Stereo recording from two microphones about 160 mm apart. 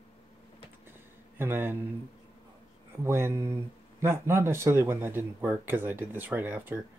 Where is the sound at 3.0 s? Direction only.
15° right (ahead or behind).